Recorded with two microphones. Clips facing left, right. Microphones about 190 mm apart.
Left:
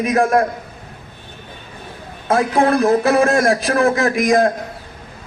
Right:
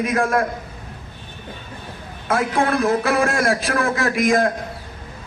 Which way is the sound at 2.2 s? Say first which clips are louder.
Left 4 dB; 30° left (ahead or behind).